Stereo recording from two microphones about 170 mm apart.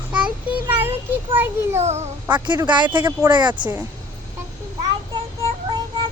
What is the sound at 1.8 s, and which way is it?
Speech, 40° right (ahead or behind).